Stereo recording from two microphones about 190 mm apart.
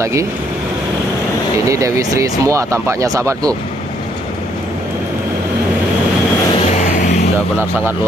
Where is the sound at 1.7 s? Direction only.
15° right (ahead or behind).